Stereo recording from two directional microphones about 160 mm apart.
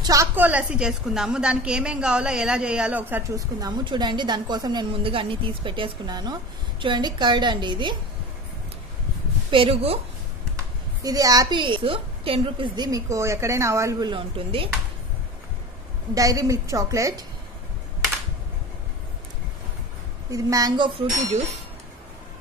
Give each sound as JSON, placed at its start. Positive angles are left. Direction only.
{"t": 0.0, "sound": "a woman's voice", "side_deg": -20}
{"t": 9.5, "sound": "speech", "side_deg": -35}
{"t": 11.0, "sound": "a woman's voice", "side_deg": -20}
{"t": 16.2, "sound": "a woman's voice", "side_deg": -20}
{"t": 20.2, "sound": "a woman's voice", "side_deg": -20}